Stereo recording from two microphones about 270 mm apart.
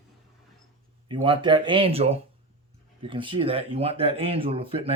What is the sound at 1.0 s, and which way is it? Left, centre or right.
Speech, centre.